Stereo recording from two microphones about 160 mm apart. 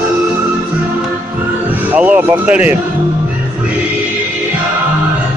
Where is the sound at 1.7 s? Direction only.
10° right (ahead or behind).